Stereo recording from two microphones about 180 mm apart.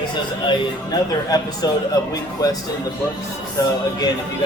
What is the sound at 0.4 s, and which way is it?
Speech, 20° left (ahead or behind).